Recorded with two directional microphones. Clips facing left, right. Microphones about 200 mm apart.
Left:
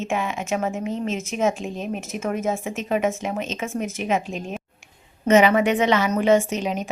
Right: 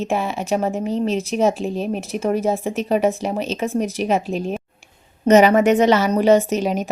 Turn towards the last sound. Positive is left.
turn(degrees=-40)  # may be behind; listen again after turning